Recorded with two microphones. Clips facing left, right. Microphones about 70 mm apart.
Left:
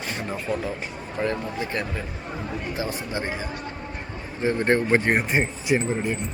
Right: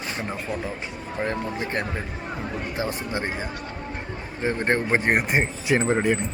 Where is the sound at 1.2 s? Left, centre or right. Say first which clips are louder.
Left 2 dB; right.